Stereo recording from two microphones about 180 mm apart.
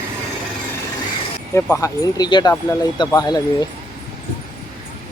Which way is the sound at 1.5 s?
15° left (ahead or behind).